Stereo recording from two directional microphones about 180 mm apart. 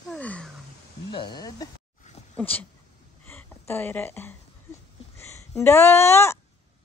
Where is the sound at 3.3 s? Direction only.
10° left (ahead or behind).